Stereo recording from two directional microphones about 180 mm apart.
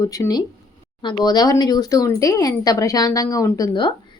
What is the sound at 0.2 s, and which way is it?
Speech, 20° left (ahead or behind).